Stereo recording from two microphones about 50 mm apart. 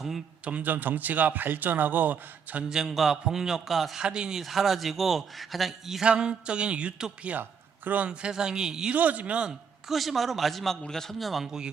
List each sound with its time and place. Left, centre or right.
0.4 s speech: right
0.7 s a man's voice: right
2.6 s a man's voice: centre
4.0 s a man's voice: centre
4.4 s a man's voice: centre
6.1 s a man's voice: centre
8.1 s a man's voice: centre
8.9 s speech: right
9.9 s a man's voice: centre
11.4 s a man's voice: centre